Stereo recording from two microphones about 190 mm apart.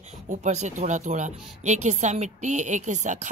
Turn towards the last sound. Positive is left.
turn(degrees=-40)  # may be behind; listen again after turning